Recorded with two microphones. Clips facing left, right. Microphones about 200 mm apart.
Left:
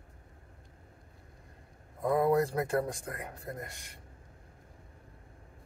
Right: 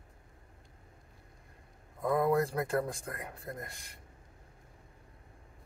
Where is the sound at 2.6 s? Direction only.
25° left (ahead or behind).